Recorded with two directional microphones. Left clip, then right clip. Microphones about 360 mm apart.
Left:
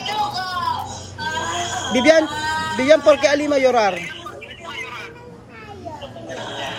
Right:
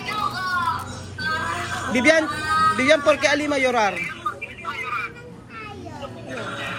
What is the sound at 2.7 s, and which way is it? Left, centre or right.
Speech, centre.